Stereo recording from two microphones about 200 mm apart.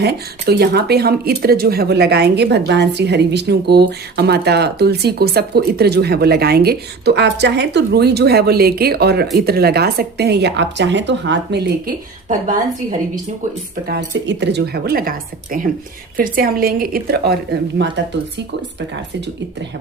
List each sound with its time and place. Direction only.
0.0 s speech: 55° right (ahead or behind)
12.3 s a woman's voice: 40° right (ahead or behind)
13.8 s speech: 55° right (ahead or behind)
17.8 s speech: 60° right (ahead or behind)